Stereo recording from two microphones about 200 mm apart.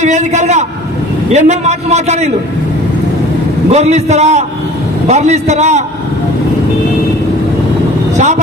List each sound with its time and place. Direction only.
0.0 s a man's voice: 35° right (ahead or behind)
3.7 s a man's voice: 35° right (ahead or behind)